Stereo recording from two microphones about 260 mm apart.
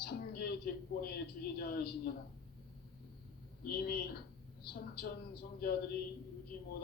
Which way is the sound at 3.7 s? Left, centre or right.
Left.